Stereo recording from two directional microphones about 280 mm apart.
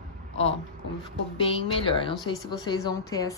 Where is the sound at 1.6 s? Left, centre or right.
Centre.